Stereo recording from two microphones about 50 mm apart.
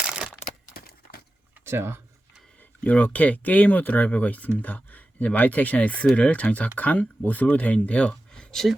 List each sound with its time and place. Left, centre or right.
1.6 s speech: right
2.6 s speech: left